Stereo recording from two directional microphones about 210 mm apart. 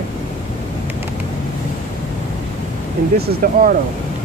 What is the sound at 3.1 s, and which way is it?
Speech, 45° right (ahead or behind).